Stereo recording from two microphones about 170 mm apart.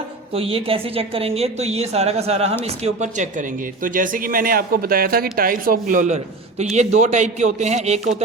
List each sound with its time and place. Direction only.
0.3 s a woman's voice: 35° right (ahead or behind)